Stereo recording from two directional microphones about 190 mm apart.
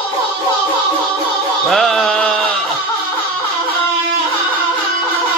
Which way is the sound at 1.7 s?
Centre (ahead or behind).